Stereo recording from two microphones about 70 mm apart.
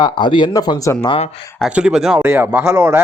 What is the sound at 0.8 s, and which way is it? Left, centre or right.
Speech, left.